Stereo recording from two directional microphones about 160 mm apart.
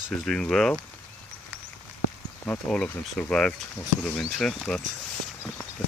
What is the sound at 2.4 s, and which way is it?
Speech, 5° left (ahead or behind).